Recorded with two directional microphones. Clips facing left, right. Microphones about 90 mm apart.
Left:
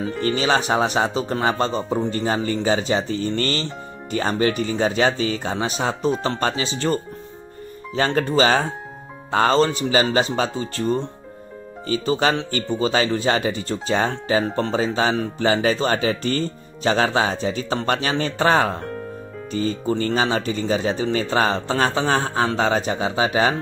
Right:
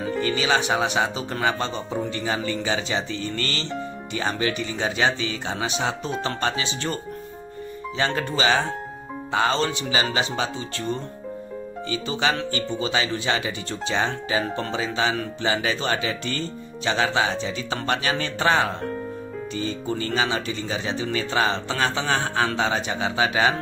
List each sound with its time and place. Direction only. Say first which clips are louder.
0.2 s speech: left 3 dB; 40° left (ahead or behind)